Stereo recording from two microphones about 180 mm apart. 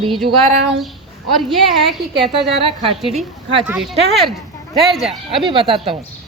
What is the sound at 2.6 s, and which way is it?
Speech, 30° right (ahead or behind).